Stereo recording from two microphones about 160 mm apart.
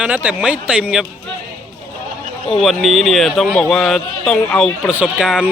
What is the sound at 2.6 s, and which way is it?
Speech, centre (ahead or behind).